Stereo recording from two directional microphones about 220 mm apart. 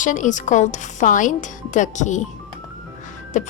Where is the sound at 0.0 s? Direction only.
35° left (ahead or behind).